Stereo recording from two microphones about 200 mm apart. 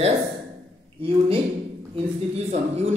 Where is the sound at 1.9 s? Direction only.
30° right (ahead or behind).